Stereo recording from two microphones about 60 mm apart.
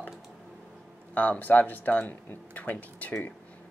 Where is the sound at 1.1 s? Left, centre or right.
Left.